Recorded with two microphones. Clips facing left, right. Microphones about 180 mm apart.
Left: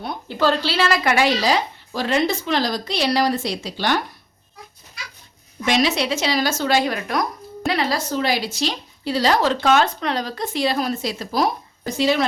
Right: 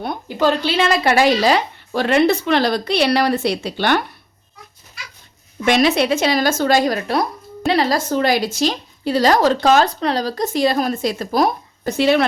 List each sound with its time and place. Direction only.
0.3 s a woman's voice: 15° right (ahead or behind)
1.5 s a woman's voice: 60° right (ahead or behind)
5.6 s a woman's voice: 55° right (ahead or behind)